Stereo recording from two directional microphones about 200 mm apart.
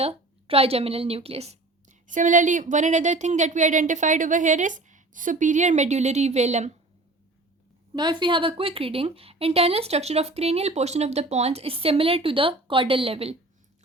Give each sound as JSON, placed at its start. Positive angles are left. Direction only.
{"t": 0.0, "sound": "a woman's voice", "side_deg": -30}
{"t": 7.9, "sound": "a woman's voice", "side_deg": -20}